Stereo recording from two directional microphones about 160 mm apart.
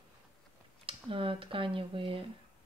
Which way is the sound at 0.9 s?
35° right (ahead or behind).